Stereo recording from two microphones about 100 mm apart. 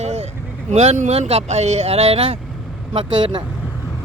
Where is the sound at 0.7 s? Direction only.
90° right; by 2.4 s 75° right (ahead or behind).